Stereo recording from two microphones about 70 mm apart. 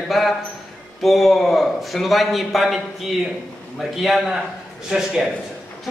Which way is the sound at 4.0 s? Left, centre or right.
Centre.